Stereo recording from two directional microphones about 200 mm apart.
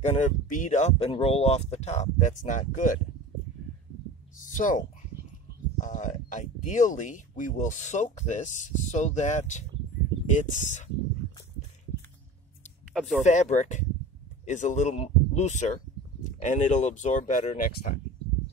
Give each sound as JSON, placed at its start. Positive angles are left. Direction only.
{"t": 0.0, "sound": "speech", "side_deg": 35}
{"t": 4.4, "sound": "speech", "side_deg": 40}
{"t": 12.9, "sound": "speech", "side_deg": 0}
{"t": 13.2, "sound": "speech", "side_deg": 35}